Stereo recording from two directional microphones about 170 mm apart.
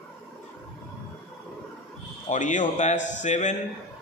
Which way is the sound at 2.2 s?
45° left (ahead or behind).